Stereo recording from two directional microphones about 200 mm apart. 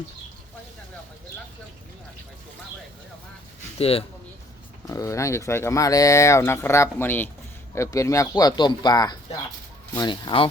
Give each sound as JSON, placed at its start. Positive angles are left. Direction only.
{"t": 3.8, "sound": "speech", "side_deg": 30}
{"t": 4.9, "sound": "speech", "side_deg": 15}